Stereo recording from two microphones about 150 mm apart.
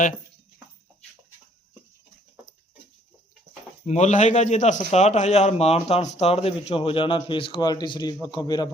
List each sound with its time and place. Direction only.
3.8 s speech: 50° left (ahead or behind); by 8.7 s 25° left (ahead or behind)